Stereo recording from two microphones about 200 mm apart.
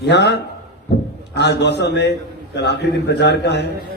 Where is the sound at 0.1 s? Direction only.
60° left (ahead or behind).